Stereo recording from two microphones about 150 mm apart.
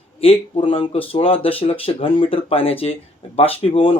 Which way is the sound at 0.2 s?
40° left (ahead or behind).